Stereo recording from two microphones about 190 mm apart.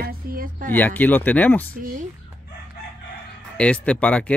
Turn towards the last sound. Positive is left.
turn(degrees=5)  # may be behind; listen again after turning